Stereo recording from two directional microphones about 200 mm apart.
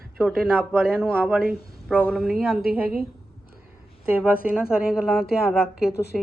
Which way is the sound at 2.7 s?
50° right (ahead or behind).